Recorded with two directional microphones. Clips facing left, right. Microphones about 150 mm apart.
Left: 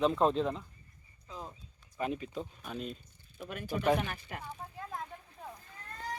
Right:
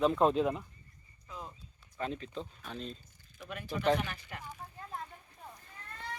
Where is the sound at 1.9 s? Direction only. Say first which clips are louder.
Left 2 dB; 10° left (ahead or behind).